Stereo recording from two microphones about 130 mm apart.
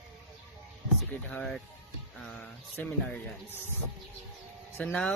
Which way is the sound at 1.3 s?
5° left (ahead or behind).